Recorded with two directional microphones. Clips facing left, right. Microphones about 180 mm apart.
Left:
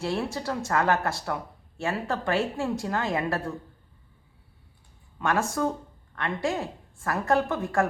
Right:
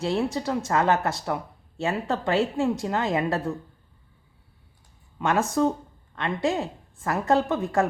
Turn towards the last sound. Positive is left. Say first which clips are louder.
# right 2 dB
turn(degrees=-20)  # may be behind; listen again after turning